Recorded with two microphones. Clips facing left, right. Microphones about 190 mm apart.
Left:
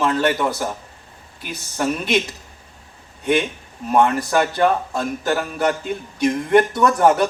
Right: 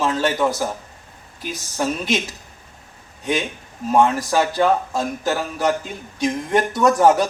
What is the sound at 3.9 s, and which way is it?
A man's voice, 60° left (ahead or behind).